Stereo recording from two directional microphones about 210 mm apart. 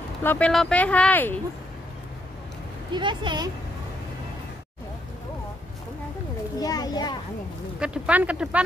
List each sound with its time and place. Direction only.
0.2 s speech: 10° left (ahead or behind)
2.9 s speech: 20° right (ahead or behind)
6.6 s a child's voice: 20° left (ahead or behind)
7.8 s speech: 5° right (ahead or behind)